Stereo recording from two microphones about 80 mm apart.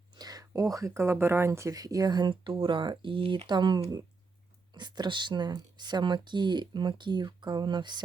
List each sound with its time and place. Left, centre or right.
0.2 s speech: right